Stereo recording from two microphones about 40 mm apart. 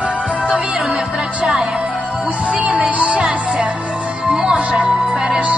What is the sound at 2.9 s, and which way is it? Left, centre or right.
Music, right.